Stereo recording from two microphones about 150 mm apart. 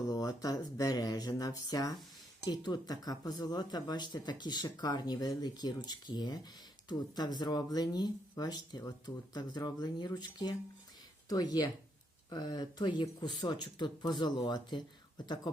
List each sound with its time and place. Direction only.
0.1 s speech: 25° left (ahead or behind)